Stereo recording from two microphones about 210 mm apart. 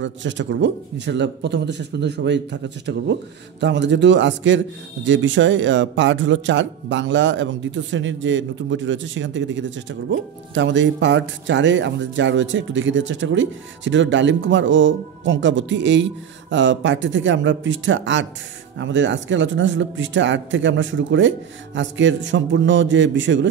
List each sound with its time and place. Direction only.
0.0 s speech: 60° right (ahead or behind)